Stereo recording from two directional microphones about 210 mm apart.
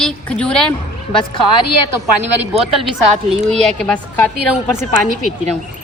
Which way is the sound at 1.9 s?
10° right (ahead or behind).